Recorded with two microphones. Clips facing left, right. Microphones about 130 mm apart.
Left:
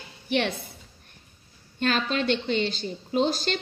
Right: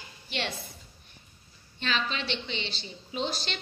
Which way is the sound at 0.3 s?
55° left (ahead or behind).